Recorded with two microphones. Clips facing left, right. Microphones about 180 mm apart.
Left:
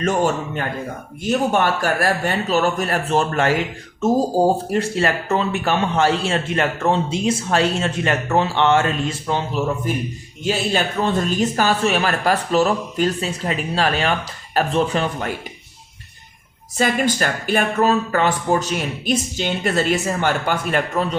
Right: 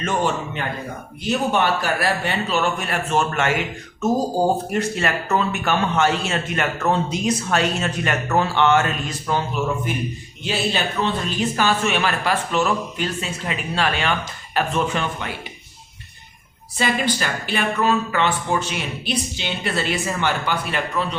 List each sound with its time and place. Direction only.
0.0 s speech: 40° left (ahead or behind)
10.4 s speech: 45° left (ahead or behind)
16.7 s speech: 45° left (ahead or behind)